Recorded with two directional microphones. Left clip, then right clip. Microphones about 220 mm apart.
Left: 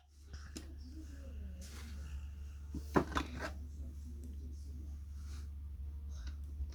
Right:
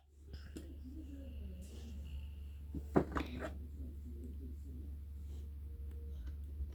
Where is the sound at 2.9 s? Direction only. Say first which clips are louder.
Left 1 dB; 25° left (ahead or behind).